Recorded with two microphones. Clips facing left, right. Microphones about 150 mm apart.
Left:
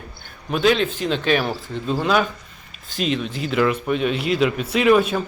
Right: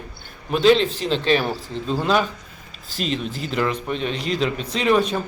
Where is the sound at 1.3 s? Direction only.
5° left (ahead or behind).